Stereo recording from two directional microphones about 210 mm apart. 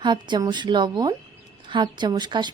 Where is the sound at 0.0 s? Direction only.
20° right (ahead or behind).